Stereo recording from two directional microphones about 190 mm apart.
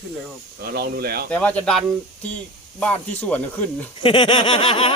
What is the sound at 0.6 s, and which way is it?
Speech, 55° right (ahead or behind).